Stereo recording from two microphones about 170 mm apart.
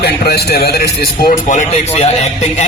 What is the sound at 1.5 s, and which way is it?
A man's voice, 45° left (ahead or behind).